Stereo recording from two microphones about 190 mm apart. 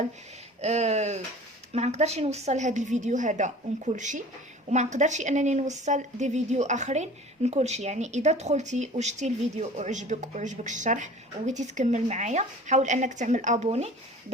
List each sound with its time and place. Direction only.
0.6 s a woman's voice: 35° right (ahead or behind)